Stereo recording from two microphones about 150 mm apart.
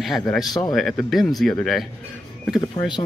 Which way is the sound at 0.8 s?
Centre (ahead or behind).